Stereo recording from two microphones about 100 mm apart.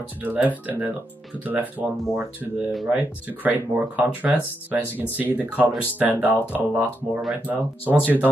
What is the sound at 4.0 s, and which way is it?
Speech, 15° right (ahead or behind).